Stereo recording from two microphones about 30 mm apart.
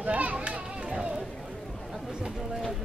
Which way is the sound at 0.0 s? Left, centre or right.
Right.